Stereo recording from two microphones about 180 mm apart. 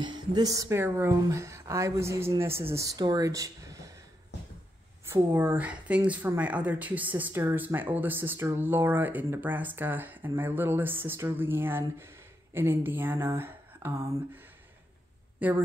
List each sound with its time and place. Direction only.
0.0 s speech: 25° right (ahead or behind)
5.0 s speech: 10° right (ahead or behind)
15.3 s a sound: 10° right (ahead or behind)